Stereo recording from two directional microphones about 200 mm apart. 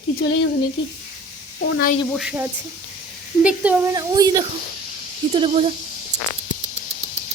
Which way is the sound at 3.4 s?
5° right (ahead or behind).